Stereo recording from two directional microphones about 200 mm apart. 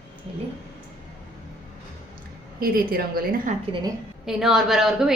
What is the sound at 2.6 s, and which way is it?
Speech, 45° right (ahead or behind).